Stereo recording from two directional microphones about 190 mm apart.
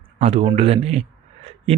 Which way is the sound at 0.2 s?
30° right (ahead or behind).